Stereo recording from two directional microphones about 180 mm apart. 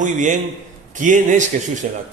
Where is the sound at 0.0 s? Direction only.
45° right (ahead or behind).